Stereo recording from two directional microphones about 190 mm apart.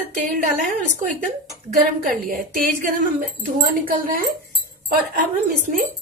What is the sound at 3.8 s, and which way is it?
Speech, 45° right (ahead or behind).